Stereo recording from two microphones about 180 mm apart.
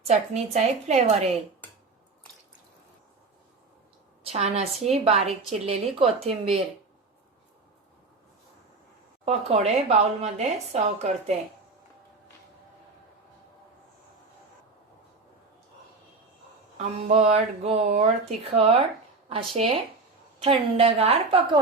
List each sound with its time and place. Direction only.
0.1 s a woman's voice: 35° right (ahead or behind)
4.2 s a woman's voice: 35° right (ahead or behind)
9.2 s a woman's voice: 35° right (ahead or behind)
16.7 s a woman's voice: 40° right (ahead or behind)